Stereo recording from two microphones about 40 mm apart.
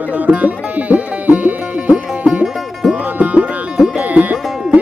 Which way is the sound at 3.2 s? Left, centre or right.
Right.